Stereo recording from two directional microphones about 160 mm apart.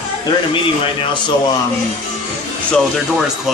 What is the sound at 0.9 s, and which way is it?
Speech, 30° left (ahead or behind).